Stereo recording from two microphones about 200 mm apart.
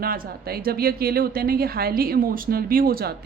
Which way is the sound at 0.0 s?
45° right (ahead or behind).